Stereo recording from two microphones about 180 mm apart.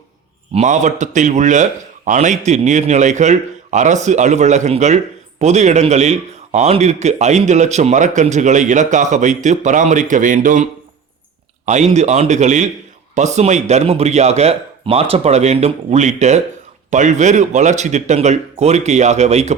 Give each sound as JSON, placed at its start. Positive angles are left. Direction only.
{"t": 0.5, "sound": "a man's voice", "side_deg": -40}